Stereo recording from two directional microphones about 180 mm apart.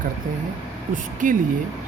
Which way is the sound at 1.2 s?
50° right (ahead or behind).